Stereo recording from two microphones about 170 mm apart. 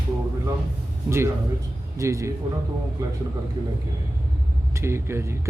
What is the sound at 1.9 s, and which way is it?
Speech, 15° right (ahead or behind).